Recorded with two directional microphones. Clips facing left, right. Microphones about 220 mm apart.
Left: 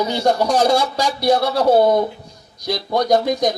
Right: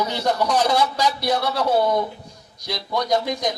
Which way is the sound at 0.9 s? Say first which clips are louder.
Left 5 dB; 30° left (ahead or behind).